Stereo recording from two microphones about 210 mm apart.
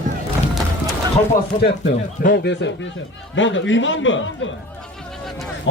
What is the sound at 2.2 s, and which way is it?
Speech, 50° left (ahead or behind).